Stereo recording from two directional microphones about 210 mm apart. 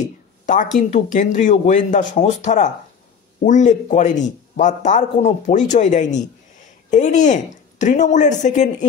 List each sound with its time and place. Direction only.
0.7 s speech: 35° left (ahead or behind)